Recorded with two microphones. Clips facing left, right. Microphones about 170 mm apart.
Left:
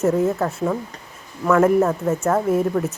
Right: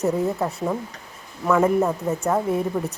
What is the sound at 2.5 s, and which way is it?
Speech, centre (ahead or behind).